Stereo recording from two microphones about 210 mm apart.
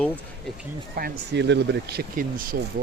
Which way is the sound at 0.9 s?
50° right (ahead or behind).